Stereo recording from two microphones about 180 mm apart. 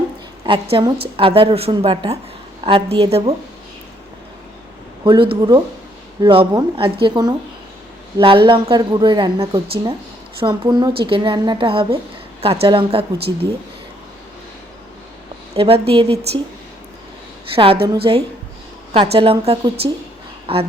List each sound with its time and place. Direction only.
0.4 s a woman's voice: 30° right (ahead or behind)
5.0 s a woman's voice: 30° right (ahead or behind)
15.5 s speech: 30° right (ahead or behind)
17.5 s a woman's voice: 30° right (ahead or behind)